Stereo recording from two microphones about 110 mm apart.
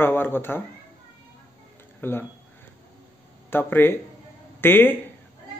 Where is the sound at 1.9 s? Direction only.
20° left (ahead or behind).